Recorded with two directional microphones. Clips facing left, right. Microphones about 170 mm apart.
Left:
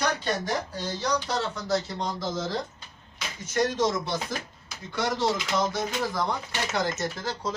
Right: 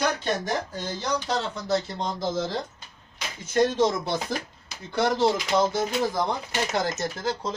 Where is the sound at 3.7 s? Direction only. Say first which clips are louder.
Right 3 dB; 30° right (ahead or behind).